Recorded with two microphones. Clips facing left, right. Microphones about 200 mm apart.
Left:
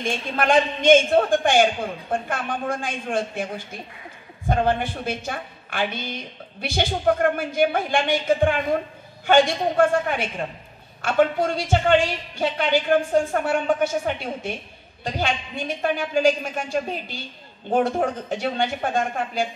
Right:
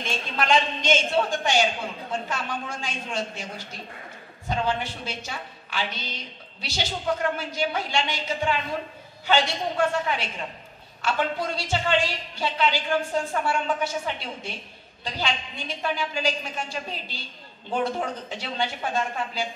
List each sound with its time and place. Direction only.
0.0 s a woman's voice: 55° left (ahead or behind)